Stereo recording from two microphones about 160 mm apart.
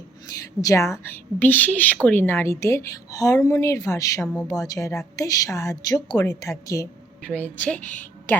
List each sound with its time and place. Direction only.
0.6 s a woman's voice: 20° left (ahead or behind)
7.2 s a woman's voice: 10° left (ahead or behind)